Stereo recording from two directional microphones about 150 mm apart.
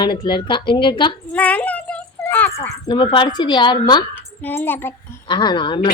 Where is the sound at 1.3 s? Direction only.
10° left (ahead or behind).